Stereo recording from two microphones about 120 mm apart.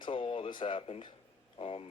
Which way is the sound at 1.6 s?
55° left (ahead or behind).